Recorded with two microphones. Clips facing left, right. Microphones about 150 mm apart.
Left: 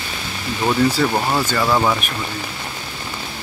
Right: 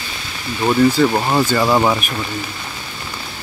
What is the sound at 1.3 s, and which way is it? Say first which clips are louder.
Speech: right 3 dB; 20° right (ahead or behind).